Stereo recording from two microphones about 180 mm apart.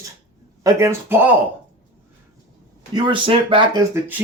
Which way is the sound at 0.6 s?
15° right (ahead or behind).